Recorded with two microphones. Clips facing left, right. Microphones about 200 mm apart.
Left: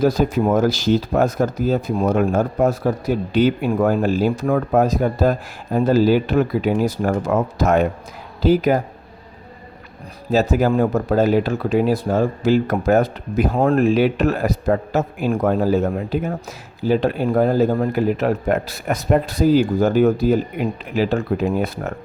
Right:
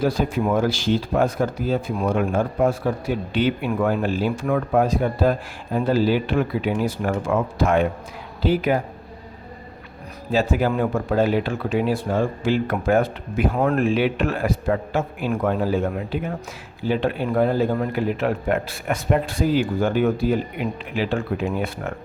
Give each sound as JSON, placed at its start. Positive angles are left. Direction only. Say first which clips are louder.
{"t": 0.0, "sound": "speech", "louder": "left 4 dB", "side_deg": 40}
{"t": 10.3, "sound": "speech", "louder": "left 4 dB", "side_deg": 40}